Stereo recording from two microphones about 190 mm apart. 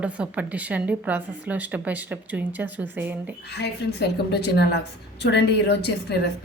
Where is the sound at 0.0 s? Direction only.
5° right (ahead or behind).